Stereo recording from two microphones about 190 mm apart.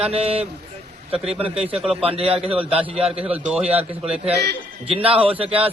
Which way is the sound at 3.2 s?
5° right (ahead or behind).